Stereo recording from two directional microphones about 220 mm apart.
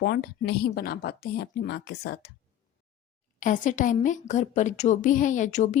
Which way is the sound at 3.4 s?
35° left (ahead or behind).